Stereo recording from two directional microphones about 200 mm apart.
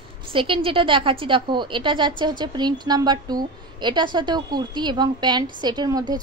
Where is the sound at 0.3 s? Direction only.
25° right (ahead or behind).